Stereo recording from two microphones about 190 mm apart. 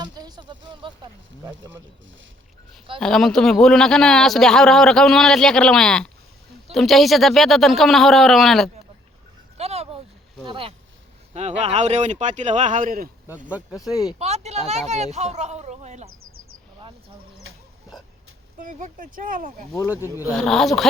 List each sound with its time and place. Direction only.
0.0 s a sound: 20° right (ahead or behind)
3.0 s a man's voice: centre (ahead or behind)
9.6 s a sound: 35° right (ahead or behind)
10.4 s speech: 25° right (ahead or behind); by 13.1 s 45° right (ahead or behind)
14.2 s speech: 35° right (ahead or behind)
18.6 s speech: 45° right (ahead or behind)
19.7 s speech: 10° right (ahead or behind)
20.3 s a man's voice: centre (ahead or behind)